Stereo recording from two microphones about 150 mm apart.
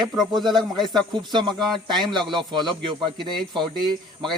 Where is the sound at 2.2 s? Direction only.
Centre (ahead or behind).